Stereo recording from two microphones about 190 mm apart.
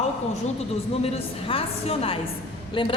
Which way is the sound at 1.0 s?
30° left (ahead or behind).